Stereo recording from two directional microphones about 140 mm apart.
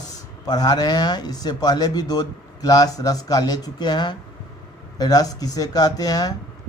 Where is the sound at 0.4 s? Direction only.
30° left (ahead or behind).